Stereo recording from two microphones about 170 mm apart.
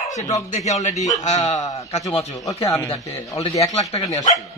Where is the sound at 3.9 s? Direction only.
25° left (ahead or behind).